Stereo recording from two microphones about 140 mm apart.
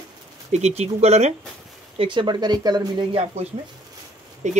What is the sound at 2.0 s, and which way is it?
Speech, 35° right (ahead or behind).